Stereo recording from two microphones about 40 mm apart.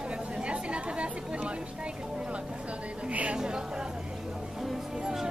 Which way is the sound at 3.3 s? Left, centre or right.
Right.